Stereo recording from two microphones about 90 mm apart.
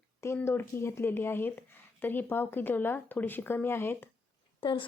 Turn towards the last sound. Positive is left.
turn(degrees=70)  # may be behind; listen again after turning